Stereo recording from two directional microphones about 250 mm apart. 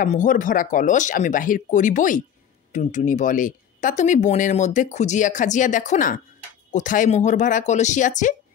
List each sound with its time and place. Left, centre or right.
0.0 s speech: left